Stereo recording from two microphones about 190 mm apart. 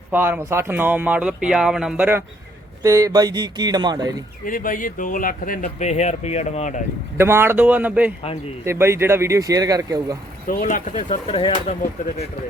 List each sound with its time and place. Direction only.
0.1 s speech: 10° right (ahead or behind)
4.4 s speech: 45° left (ahead or behind)
7.2 s speech: 10° right (ahead or behind)
10.4 s speech: 45° left (ahead or behind)